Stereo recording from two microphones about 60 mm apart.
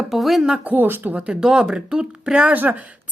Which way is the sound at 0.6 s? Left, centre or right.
Right.